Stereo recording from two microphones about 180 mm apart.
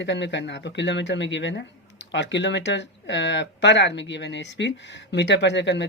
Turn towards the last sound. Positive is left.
turn(degrees=75)  # may be behind; listen again after turning